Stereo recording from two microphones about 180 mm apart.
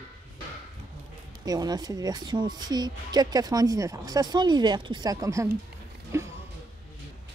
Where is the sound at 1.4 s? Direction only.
20° right (ahead or behind).